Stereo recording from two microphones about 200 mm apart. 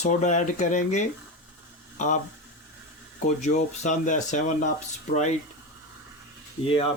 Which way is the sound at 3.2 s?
35° left (ahead or behind).